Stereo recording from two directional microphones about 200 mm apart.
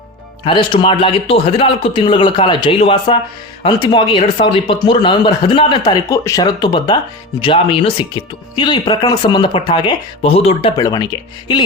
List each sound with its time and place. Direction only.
0.4 s speech: 25° left (ahead or behind)
10.8 s speech: 20° left (ahead or behind)